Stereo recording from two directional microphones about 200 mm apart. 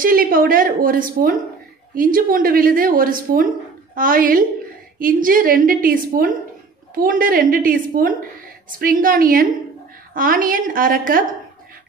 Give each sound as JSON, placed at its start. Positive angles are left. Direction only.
{"t": 0.0, "sound": "a woman's voice", "side_deg": -45}